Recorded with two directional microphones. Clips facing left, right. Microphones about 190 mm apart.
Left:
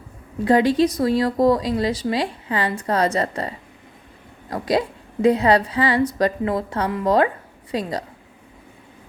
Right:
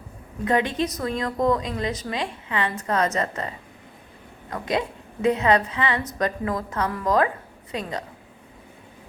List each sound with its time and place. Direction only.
0.4 s speech: 35° left (ahead or behind)